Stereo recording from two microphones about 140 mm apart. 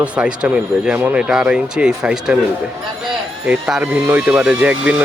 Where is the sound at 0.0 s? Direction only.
10° right (ahead or behind).